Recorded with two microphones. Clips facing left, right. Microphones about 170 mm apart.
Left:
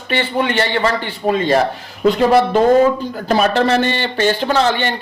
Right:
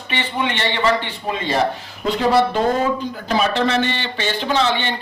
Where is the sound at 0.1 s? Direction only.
40° left (ahead or behind).